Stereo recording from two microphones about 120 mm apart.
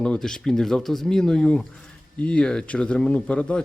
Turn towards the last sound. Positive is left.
turn(degrees=10)  # may be behind; listen again after turning